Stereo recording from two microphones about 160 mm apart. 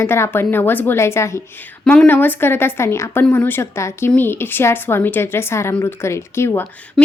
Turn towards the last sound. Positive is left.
turn(degrees=15)  # may be behind; listen again after turning